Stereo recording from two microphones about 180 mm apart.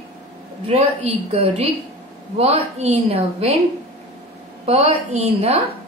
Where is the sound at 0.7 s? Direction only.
35° right (ahead or behind).